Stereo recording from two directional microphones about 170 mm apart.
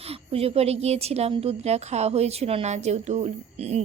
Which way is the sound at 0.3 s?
35° right (ahead or behind).